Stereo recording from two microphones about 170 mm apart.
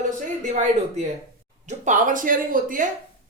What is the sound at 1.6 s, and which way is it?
Speech, 45° right (ahead or behind).